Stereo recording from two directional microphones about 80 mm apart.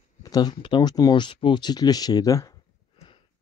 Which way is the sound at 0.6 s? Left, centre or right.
Left.